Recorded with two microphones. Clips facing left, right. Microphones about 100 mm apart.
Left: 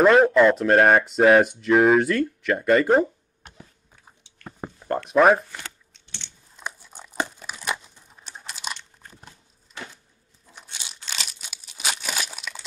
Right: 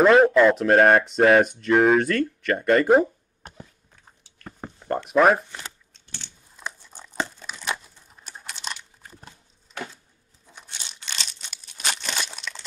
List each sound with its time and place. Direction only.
0.0 s speech: centre (ahead or behind)
4.5 s speech: 5° left (ahead or behind)
5.9 s typing: 40° right (ahead or behind)
6.6 s crumpling: 15° left (ahead or behind)
8.1 s typing: centre (ahead or behind)
8.7 s crunch: 5° right (ahead or behind)
10.5 s crumpling: 5° left (ahead or behind)